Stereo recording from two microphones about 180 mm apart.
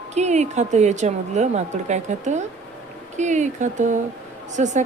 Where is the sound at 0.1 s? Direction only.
40° right (ahead or behind).